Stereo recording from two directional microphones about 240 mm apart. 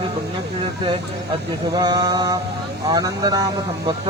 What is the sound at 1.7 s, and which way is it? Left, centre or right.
Speech, centre.